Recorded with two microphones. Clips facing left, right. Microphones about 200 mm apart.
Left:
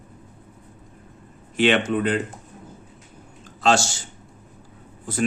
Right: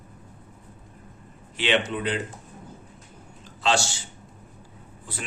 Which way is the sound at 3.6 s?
45° left (ahead or behind).